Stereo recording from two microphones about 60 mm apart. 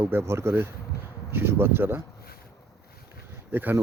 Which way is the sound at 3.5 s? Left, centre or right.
Right.